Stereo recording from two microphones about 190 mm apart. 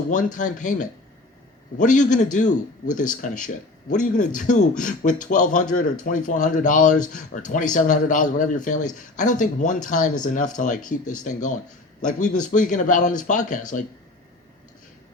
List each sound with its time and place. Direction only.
0.3 s a man's voice: 40° left (ahead or behind)